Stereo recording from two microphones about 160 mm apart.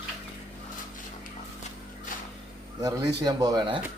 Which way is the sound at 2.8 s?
25° right (ahead or behind).